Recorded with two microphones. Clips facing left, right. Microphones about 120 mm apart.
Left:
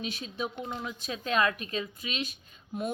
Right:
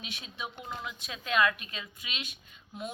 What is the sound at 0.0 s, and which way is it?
Speech, 40° left (ahead or behind).